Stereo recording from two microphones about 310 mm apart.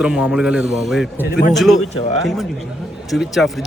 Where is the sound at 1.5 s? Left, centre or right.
Centre.